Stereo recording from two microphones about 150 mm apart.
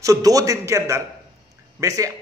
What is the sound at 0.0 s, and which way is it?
A man's voice, 20° right (ahead or behind).